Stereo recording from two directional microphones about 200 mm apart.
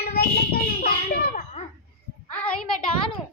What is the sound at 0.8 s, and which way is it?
Children playing, 45° left (ahead or behind).